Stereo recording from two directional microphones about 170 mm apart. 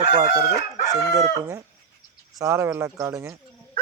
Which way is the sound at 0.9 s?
20° right (ahead or behind).